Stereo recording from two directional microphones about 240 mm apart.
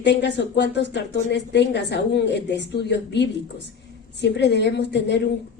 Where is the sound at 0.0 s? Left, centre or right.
Left.